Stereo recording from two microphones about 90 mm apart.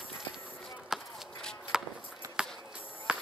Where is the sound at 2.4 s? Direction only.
10° right (ahead or behind).